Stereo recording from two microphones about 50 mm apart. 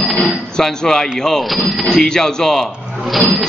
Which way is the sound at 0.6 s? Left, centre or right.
Centre.